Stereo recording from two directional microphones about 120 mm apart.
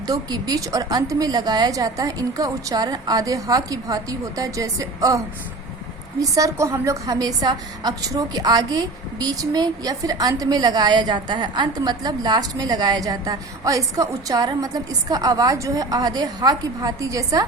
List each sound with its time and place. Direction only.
0.1 s a woman's voice: 35° right (ahead or behind)